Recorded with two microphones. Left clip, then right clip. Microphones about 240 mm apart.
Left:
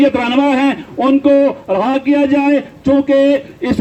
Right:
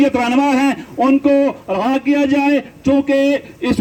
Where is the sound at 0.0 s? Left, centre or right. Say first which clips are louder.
Left 2 dB; right.